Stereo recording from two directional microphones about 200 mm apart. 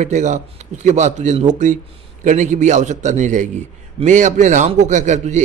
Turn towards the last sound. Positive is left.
turn(degrees=-35)  # may be behind; listen again after turning